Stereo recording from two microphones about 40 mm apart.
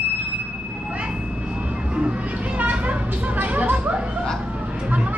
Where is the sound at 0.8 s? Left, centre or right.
Right.